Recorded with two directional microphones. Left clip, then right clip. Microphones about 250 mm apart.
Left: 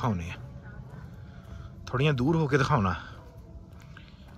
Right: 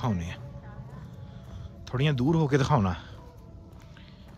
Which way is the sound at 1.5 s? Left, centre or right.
Centre.